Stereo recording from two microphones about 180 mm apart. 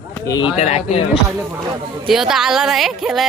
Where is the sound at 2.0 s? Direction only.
Centre (ahead or behind).